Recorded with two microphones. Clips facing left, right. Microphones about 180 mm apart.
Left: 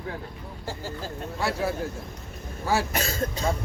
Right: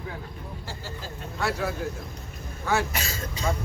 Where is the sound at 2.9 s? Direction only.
50° left (ahead or behind).